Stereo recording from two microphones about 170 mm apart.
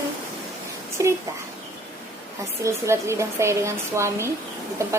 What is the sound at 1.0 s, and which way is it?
Speech, 20° right (ahead or behind).